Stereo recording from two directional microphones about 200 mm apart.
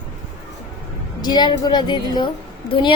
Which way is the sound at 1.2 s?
20° left (ahead or behind).